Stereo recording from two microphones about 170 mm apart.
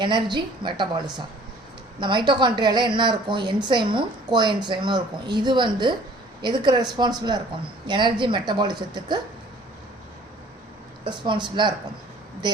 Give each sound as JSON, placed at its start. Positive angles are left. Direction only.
{"t": 0.0, "sound": "a woman's voice", "side_deg": -25}
{"t": 11.0, "sound": "a woman's voice", "side_deg": -25}